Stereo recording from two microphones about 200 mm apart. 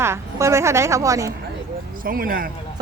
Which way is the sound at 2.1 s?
45° right (ahead or behind).